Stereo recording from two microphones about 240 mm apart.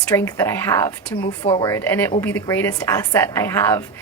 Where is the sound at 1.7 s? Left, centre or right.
Centre.